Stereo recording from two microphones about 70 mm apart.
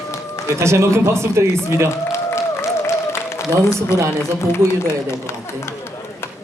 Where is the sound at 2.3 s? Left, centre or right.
Left.